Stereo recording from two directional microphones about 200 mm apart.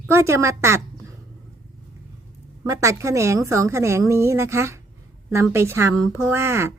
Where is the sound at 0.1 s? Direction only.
15° right (ahead or behind).